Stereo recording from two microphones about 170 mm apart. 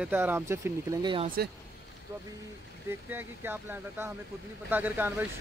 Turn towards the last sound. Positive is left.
turn(degrees=-10)  # may be behind; listen again after turning